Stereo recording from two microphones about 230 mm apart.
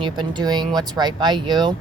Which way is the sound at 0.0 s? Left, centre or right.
Centre.